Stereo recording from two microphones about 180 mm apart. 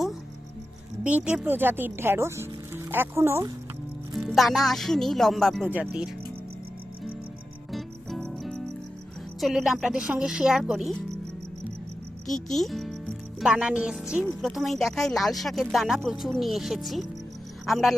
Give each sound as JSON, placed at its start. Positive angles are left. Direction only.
{"t": 1.0, "sound": "speech", "side_deg": -5}
{"t": 4.3, "sound": "speech", "side_deg": 0}
{"t": 5.6, "sound": "speech", "side_deg": -10}
{"t": 7.7, "sound": "music", "side_deg": 0}
{"t": 9.4, "sound": "speech", "side_deg": 0}
{"t": 12.3, "sound": "speech", "side_deg": 0}